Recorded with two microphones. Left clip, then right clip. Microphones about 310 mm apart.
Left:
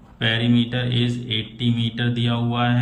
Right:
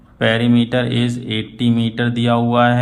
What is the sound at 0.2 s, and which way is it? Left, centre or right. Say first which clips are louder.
Speech: right 5 dB; centre.